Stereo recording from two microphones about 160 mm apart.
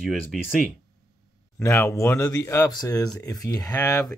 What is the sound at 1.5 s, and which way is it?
Speech, 15° left (ahead or behind).